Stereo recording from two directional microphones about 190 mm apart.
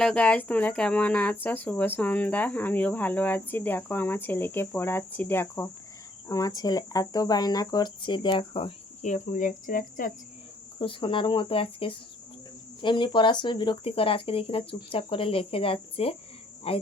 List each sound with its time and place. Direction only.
0.0 s speech: 5° left (ahead or behind); by 10.1 s 45° left (ahead or behind)
10.8 s speech: 25° left (ahead or behind)
16.7 s cricket: 30° left (ahead or behind)